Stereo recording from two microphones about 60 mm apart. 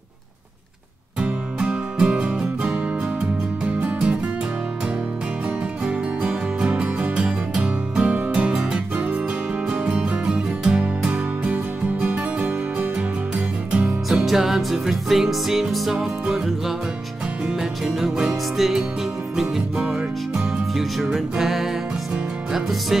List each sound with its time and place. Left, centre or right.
1.2 s music: centre
5.9 s music: centre
8.9 s music: right
13.7 s music: centre
14.0 s music: centre
16.0 s music: centre
20.7 s music: centre